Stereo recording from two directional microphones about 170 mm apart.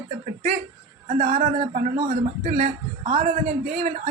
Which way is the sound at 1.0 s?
40° right (ahead or behind).